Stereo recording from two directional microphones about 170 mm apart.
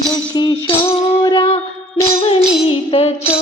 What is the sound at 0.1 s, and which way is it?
Music, 25° left (ahead or behind).